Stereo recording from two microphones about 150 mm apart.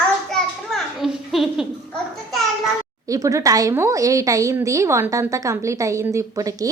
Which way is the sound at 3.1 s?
20° right (ahead or behind).